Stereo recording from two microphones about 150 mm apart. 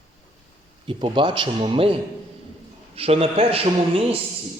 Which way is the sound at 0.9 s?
35° right (ahead or behind).